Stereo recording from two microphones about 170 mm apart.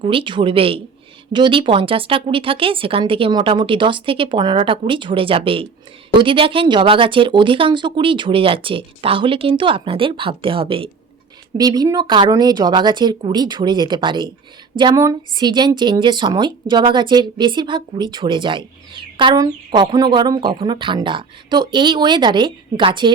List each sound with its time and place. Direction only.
0.0 s a woman's voice: 30° right (ahead or behind)